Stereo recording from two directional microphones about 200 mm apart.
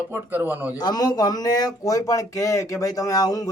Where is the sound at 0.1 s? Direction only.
10° right (ahead or behind).